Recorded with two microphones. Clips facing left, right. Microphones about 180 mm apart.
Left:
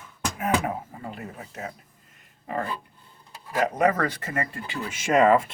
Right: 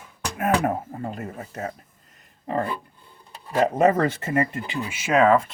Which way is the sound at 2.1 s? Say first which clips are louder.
Right 4 dB; 30° right (ahead or behind).